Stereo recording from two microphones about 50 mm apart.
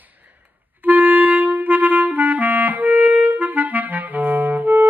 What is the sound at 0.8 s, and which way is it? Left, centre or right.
Clarinet, right.